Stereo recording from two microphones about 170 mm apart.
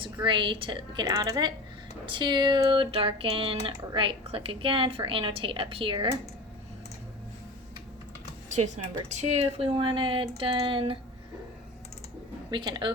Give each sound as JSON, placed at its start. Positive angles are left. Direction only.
{"t": 0.0, "sound": "a woman's voice", "side_deg": -30}
{"t": 8.4, "sound": "speech", "side_deg": -45}
{"t": 12.5, "sound": "a woman's voice", "side_deg": -25}